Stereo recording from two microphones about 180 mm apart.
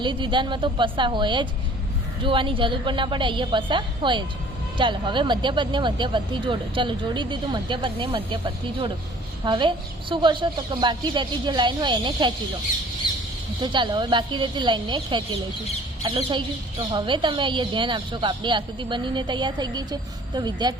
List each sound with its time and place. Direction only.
0.0 s speech: 25° right (ahead or behind)
13.0 s squawk: 25° left (ahead or behind)
13.6 s speech: 25° right (ahead or behind)